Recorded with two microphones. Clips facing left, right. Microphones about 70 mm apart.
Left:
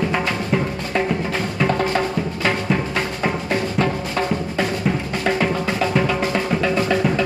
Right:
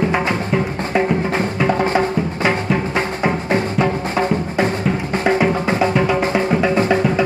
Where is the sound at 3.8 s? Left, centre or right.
Right.